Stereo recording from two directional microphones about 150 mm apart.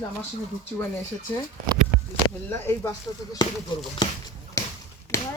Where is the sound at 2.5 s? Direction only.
15° left (ahead or behind).